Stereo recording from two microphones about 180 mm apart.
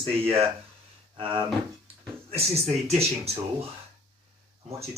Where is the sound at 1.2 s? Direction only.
30° right (ahead or behind).